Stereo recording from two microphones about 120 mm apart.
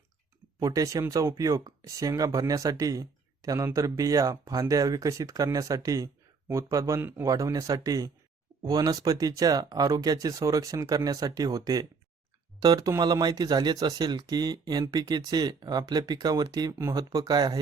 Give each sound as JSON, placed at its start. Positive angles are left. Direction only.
{"t": 0.6, "sound": "speech", "side_deg": -30}